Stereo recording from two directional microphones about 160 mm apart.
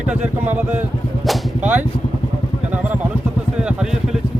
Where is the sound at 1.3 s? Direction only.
10° right (ahead or behind).